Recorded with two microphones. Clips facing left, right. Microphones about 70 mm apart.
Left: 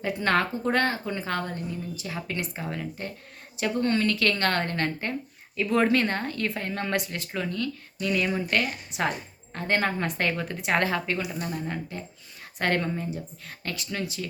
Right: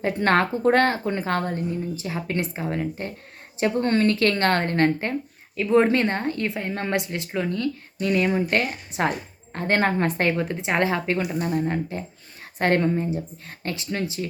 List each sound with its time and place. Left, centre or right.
0.0 s a woman's voice: right
5.6 s a woman's voice: right